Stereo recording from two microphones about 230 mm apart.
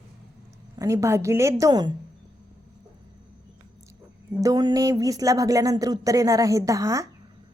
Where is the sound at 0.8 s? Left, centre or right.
Centre.